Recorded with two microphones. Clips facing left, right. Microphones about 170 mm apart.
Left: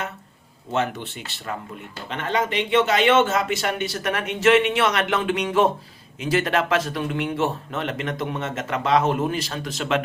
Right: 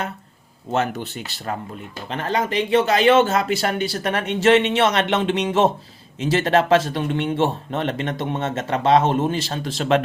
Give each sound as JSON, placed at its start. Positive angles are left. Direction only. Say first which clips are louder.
{"t": 0.7, "sound": "speech", "louder": "right 2 dB", "side_deg": -40}